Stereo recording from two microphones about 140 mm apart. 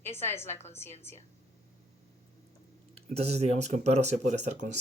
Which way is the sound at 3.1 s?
50° right (ahead or behind).